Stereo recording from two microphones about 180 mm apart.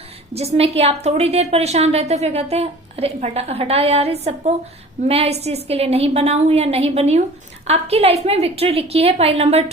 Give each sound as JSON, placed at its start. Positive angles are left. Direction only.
{"t": 0.3, "sound": "a woman's voice", "side_deg": -35}